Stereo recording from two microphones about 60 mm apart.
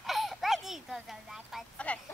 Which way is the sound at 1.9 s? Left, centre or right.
Left.